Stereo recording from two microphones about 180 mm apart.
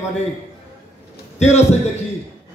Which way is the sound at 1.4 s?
40° left (ahead or behind).